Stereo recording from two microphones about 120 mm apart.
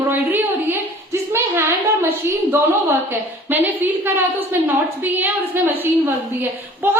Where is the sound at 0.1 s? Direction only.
15° right (ahead or behind).